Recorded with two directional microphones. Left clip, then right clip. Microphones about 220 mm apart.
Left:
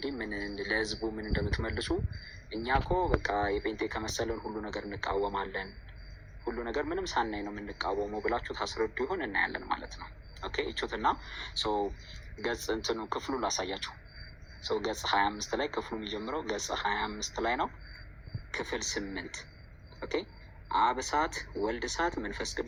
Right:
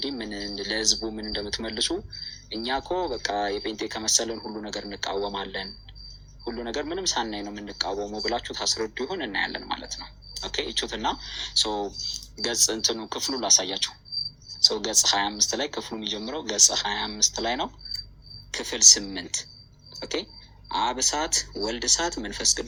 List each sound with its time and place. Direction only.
0.0 s speech: 60° right (ahead or behind)
6.5 s speech: 65° right (ahead or behind)